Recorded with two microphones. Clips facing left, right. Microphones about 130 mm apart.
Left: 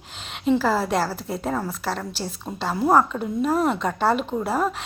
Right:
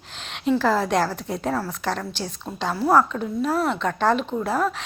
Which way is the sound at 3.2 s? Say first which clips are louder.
Left 1 dB; 5° left (ahead or behind).